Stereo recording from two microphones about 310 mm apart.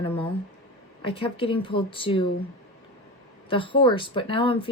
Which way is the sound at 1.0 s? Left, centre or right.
Centre.